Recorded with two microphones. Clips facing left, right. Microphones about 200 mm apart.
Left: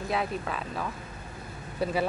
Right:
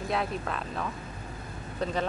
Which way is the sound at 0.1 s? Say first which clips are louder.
Left 1 dB; centre (ahead or behind).